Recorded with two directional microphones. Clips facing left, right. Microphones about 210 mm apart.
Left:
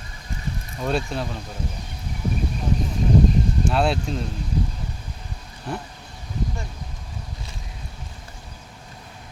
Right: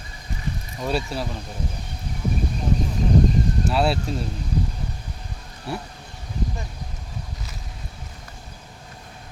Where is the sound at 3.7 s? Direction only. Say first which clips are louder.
Even; 5° right (ahead or behind).